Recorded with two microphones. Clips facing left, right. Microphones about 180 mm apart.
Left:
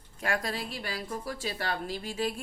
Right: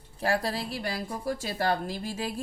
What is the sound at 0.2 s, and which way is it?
A woman's voice, 35° right (ahead or behind).